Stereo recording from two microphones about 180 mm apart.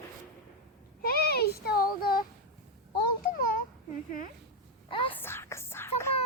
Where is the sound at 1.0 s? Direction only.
55° left (ahead or behind).